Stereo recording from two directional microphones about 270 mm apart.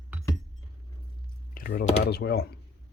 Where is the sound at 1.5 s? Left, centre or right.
Left.